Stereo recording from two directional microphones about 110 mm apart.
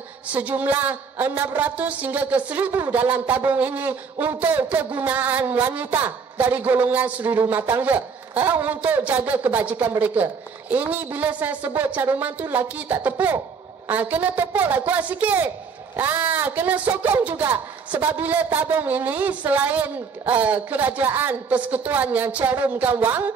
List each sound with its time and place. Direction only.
0.3 s a man's voice: 15° right (ahead or behind)